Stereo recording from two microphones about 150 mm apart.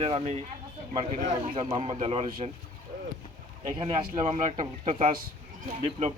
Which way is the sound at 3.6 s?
40° right (ahead or behind).